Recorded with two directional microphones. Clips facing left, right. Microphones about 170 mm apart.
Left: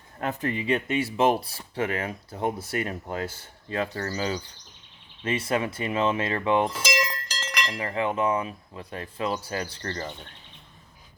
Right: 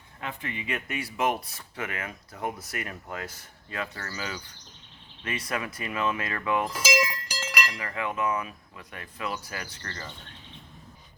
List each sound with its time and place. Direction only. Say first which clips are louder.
0.2 s speech: left 8 dB; 40° left (ahead or behind)
6.8 s cowbell: right 1 dB; 5° right (ahead or behind)
7.7 s speech: left 6 dB; 30° left (ahead or behind)